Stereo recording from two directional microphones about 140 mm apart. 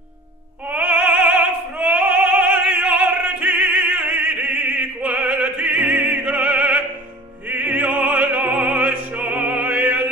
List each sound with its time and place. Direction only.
0.7 s opera: 10° right (ahead or behind)